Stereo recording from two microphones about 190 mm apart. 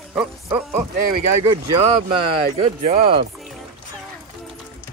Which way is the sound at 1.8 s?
30° right (ahead or behind).